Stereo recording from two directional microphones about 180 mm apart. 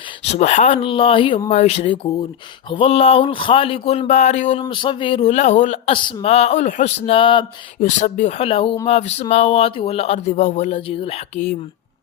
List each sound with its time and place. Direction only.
0.3 s speech: 40° left (ahead or behind)
4.6 s speech: 25° left (ahead or behind)
7.8 s speech: 45° left (ahead or behind)